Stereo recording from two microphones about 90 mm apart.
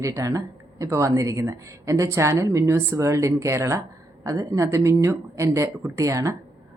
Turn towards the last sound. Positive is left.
turn(degrees=-35)  # may be behind; listen again after turning